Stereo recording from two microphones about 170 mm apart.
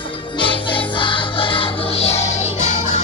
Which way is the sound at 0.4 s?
30° left (ahead or behind).